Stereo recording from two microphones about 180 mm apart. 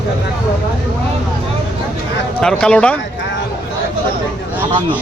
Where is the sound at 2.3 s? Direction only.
5° left (ahead or behind).